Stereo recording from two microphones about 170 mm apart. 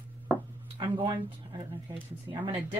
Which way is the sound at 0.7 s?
30° right (ahead or behind).